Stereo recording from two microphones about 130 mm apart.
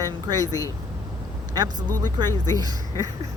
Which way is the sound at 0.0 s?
30° right (ahead or behind).